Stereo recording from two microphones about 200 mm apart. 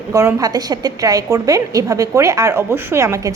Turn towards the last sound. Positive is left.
turn(degrees=-15)  # may be behind; listen again after turning